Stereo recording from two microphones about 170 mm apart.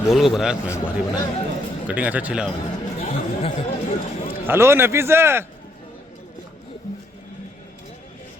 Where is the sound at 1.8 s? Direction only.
10° right (ahead or behind).